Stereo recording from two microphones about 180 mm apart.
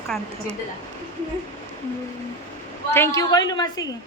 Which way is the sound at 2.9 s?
15° left (ahead or behind).